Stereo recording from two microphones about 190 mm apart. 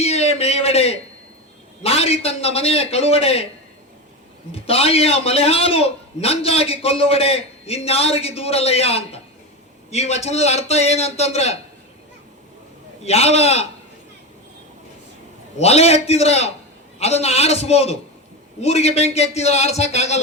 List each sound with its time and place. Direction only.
0.0 s a man's voice: 35° left (ahead or behind)
4.5 s a man's voice: 30° left (ahead or behind)
13.1 s a man's voice: 35° left (ahead or behind)
15.5 s a man's voice: 35° left (ahead or behind)